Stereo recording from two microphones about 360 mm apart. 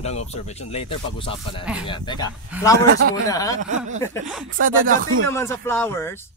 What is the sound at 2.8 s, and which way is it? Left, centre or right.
Speech, right.